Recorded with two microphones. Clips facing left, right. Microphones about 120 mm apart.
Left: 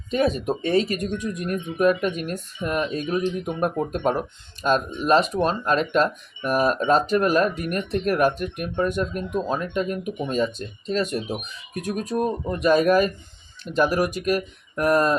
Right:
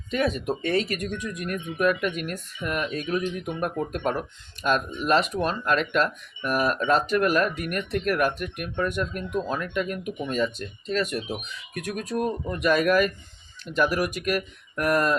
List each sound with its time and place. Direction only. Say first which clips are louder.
0.1 s speech: left 3 dB; 30° left (ahead or behind)